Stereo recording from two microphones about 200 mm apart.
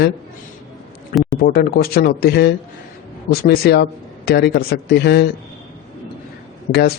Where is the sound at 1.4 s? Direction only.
50° left (ahead or behind).